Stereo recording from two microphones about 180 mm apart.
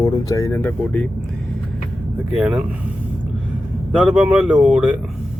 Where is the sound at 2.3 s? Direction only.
5° right (ahead or behind).